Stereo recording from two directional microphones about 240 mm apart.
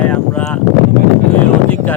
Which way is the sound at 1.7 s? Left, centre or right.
Centre.